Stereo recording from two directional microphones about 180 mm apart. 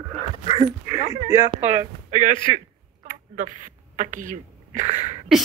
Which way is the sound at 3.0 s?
45° right (ahead or behind).